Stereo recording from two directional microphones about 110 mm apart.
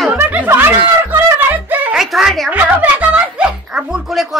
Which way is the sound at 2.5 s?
15° right (ahead or behind).